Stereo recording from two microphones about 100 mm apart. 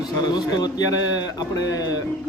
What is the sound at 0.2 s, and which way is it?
A man's voice, 45° left (ahead or behind).